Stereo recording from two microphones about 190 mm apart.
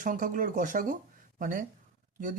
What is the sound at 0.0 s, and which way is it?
Speech, 45° right (ahead or behind).